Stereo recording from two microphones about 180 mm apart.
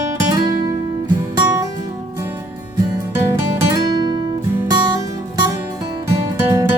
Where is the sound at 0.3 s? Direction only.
25° right (ahead or behind).